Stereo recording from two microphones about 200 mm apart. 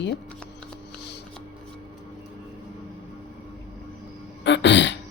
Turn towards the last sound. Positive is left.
turn(degrees=65)  # may be behind; listen again after turning